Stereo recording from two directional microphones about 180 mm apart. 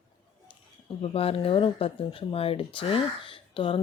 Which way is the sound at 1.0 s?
30° left (ahead or behind).